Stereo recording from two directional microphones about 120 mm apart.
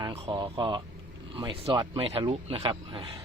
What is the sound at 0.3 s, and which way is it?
Speech, 40° right (ahead or behind).